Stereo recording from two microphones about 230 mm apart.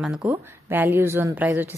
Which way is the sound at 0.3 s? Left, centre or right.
Centre.